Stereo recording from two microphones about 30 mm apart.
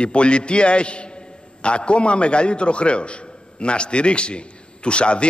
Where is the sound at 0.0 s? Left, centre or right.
Left.